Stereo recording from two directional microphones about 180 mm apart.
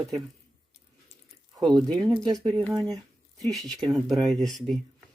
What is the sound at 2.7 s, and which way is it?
Speech, 20° right (ahead or behind).